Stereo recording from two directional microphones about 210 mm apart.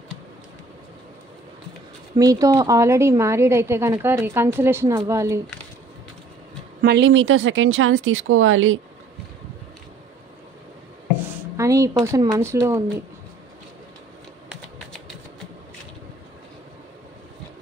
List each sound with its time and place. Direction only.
2.1 s a woman's voice: 15° right (ahead or behind)
6.8 s speech: 55° right (ahead or behind); by 8.7 s 70° right (ahead or behind)
11.5 s a woman's voice: 15° right (ahead or behind)